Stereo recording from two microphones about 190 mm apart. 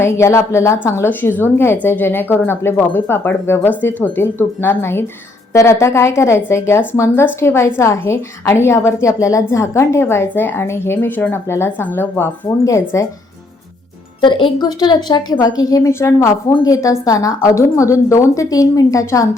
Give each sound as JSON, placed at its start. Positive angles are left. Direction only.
{"t": 0.0, "sound": "a woman's voice", "side_deg": 15}
{"t": 14.2, "sound": "a woman's voice", "side_deg": 25}